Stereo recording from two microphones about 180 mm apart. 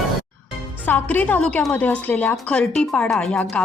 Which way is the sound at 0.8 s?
10° left (ahead or behind).